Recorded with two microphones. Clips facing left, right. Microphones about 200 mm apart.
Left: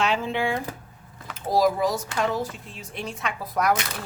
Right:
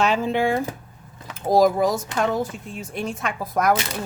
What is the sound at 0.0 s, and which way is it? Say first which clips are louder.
Speech: right 4 dB; 45° right (ahead or behind).